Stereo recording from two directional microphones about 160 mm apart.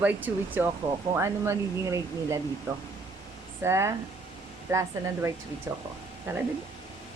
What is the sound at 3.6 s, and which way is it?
Speech, 15° right (ahead or behind).